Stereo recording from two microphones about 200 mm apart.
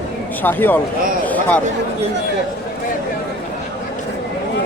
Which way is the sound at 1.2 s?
10° left (ahead or behind).